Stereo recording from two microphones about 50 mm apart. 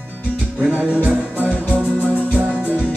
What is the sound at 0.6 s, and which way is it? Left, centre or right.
Music, right.